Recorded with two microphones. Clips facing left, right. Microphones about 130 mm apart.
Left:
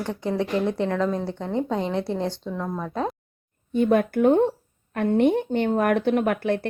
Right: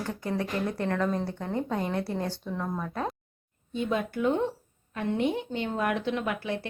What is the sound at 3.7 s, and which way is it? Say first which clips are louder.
Speech: left 9 dB; 55° left (ahead or behind).